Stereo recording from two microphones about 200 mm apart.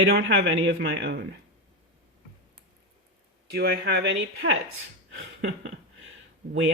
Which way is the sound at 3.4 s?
50° right (ahead or behind).